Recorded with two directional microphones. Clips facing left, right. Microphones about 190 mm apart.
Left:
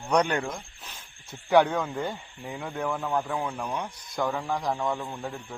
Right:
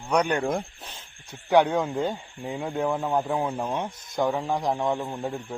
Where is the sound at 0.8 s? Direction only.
30° right (ahead or behind).